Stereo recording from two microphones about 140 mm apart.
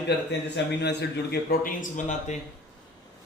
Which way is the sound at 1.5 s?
75° left (ahead or behind).